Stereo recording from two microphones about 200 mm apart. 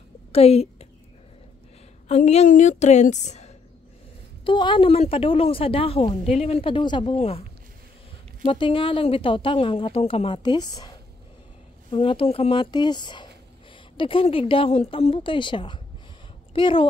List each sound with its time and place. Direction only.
0.3 s a woman's voice: 30° left (ahead or behind)
2.0 s a woman's voice: 35° left (ahead or behind)
4.5 s speech: 25° left (ahead or behind)
8.5 s speech: 25° left (ahead or behind)